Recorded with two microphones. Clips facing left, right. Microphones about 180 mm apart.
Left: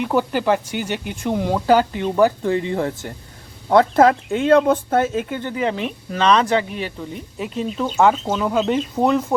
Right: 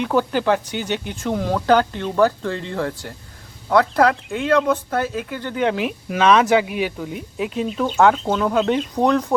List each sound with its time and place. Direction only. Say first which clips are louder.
0.0 s speech: even; 5° left (ahead or behind); by 5.5 s 25° left (ahead or behind)
5.5 s speech: right 4 dB; centre (ahead or behind)